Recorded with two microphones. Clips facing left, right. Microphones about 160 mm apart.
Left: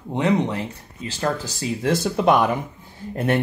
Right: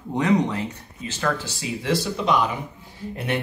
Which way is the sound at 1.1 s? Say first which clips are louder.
Left 1 dB; 35° left (ahead or behind).